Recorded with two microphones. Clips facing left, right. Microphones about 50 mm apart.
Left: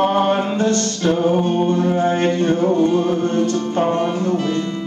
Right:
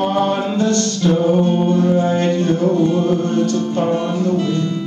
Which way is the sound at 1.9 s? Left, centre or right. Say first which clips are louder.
Right 1 dB; left.